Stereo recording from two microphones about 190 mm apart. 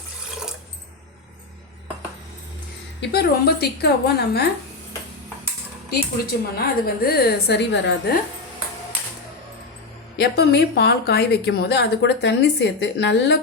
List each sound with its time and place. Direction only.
3.0 s a woman's voice: 60° left (ahead or behind)
6.6 s a woman's voice: 55° left (ahead or behind)
10.2 s a woman's voice: 60° left (ahead or behind)